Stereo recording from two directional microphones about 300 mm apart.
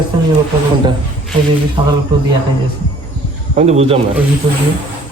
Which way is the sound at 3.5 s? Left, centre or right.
Right.